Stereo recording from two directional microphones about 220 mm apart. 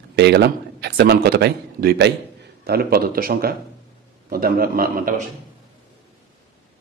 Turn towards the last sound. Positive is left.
turn(degrees=-40)  # may be behind; listen again after turning